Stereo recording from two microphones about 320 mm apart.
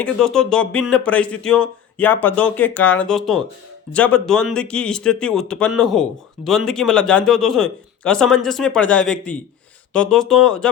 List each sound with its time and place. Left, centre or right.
0.0 s speech: centre